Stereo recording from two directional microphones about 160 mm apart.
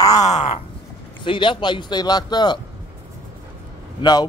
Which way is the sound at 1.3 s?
30° left (ahead or behind).